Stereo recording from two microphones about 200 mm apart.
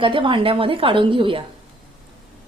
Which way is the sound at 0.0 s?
25° right (ahead or behind).